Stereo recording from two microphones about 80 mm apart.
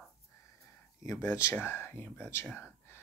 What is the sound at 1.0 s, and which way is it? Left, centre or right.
Speech, left.